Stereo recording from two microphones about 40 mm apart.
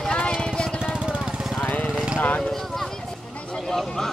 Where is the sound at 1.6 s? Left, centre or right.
Left.